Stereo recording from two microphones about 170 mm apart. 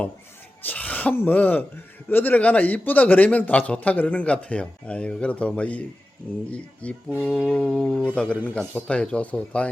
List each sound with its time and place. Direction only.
0.6 s a man's voice: 10° left (ahead or behind)
7.1 s mantra: 10° right (ahead or behind); by 8.4 s 5° left (ahead or behind)
8.4 s a man's voice: 10° left (ahead or behind)